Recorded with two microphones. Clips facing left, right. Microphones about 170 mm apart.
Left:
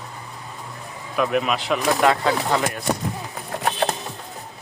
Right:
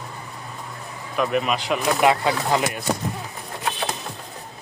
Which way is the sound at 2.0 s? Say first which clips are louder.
Even; 15° right (ahead or behind).